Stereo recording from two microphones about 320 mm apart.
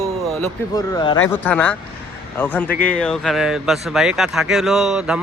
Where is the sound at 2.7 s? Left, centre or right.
Left.